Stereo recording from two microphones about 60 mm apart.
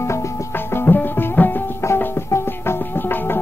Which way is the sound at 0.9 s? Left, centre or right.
Left.